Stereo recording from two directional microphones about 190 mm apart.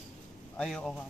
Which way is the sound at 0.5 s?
5° left (ahead or behind).